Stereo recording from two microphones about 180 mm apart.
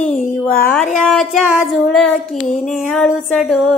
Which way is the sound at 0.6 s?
5° left (ahead or behind).